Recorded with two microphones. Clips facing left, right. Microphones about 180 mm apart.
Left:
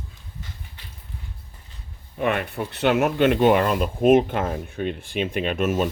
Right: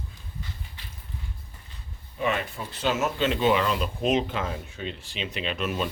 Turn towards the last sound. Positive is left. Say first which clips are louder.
# left 6 dB
turn(degrees=45)  # may be behind; listen again after turning